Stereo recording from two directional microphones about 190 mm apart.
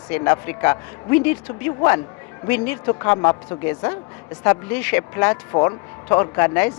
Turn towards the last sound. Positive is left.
turn(degrees=10)  # may be behind; listen again after turning